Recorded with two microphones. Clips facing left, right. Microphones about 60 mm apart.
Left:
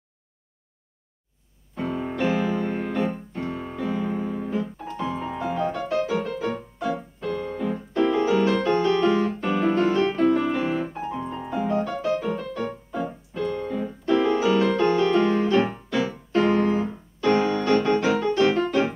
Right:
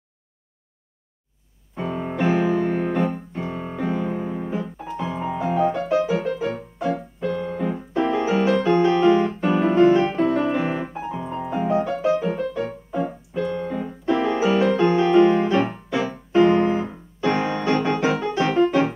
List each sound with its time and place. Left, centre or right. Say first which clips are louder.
1.8 s music: right 1 dB; centre
3.0 s piano: right 2 dB; centre
5.6 s music: right 5 dB; centre
8.7 s piano: right 3 dB; right
9.0 s piano: right 4 dB; centre
9.5 s music: right 6 dB; centre
10.7 s piano: even; centre
11.5 s music: right 3 dB; centre
13.3 s keyboard: right 2 dB; centre
14.7 s music: right 2 dB; centre
15.1 s piano: right 4 dB; centre
16.3 s music: right 5 dB; centre